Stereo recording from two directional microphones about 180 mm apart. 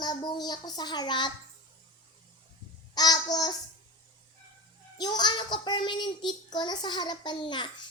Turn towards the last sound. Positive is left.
turn(degrees=25)  # may be behind; listen again after turning